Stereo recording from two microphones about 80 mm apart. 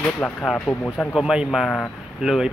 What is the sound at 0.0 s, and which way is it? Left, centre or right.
Speech, centre.